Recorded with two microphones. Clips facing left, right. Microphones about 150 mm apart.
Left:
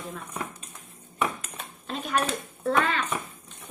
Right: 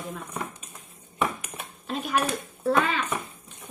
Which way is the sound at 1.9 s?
5° right (ahead or behind).